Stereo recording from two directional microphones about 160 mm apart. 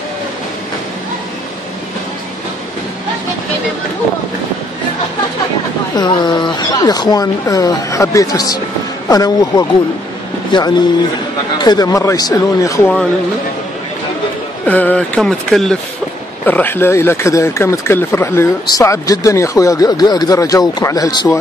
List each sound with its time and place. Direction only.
5.9 s speech: 25° left (ahead or behind)
14.7 s a sound: 10° left (ahead or behind)
16.4 s speech: 10° left (ahead or behind)